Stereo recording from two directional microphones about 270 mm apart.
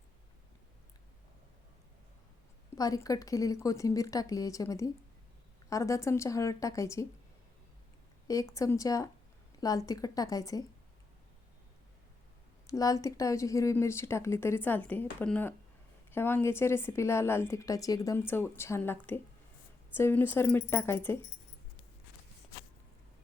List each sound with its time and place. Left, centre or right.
2.7 s a woman's voice: centre
8.3 s a woman's voice: centre
12.6 s a woman's voice: centre